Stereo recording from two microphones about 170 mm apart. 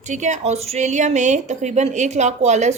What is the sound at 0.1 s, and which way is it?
Speech, 45° right (ahead or behind).